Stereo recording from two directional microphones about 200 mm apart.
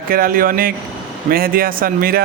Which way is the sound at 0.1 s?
45° right (ahead or behind).